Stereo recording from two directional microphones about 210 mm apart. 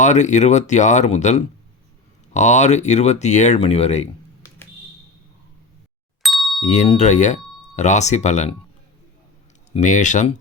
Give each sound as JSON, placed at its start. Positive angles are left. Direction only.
{"t": 0.0, "sound": "speech", "side_deg": 35}
{"t": 6.2, "sound": "ding", "side_deg": 0}
{"t": 6.6, "sound": "speech", "side_deg": 35}
{"t": 9.7, "sound": "speech", "side_deg": 35}